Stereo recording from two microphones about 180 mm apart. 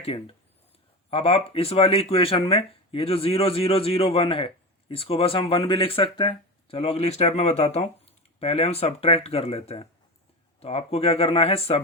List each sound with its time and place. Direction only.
0.0 s speech: 30° left (ahead or behind)